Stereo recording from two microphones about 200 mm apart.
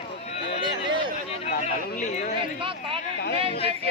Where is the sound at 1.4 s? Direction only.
35° left (ahead or behind).